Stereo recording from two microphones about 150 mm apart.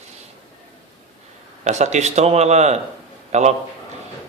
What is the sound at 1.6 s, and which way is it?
Speech, 50° right (ahead or behind).